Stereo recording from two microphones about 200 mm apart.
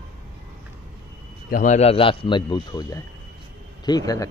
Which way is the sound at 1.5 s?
40° left (ahead or behind).